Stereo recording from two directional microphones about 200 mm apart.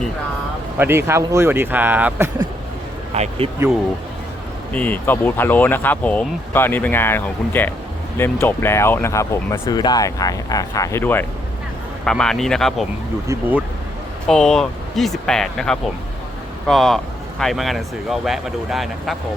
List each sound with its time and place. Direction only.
0.8 s speech: 10° right (ahead or behind)
3.1 s speech: 30° right (ahead or behind)
4.7 s speech: 10° left (ahead or behind)
13.2 s speech: 10° right (ahead or behind)
14.3 s speech: 5° left (ahead or behind)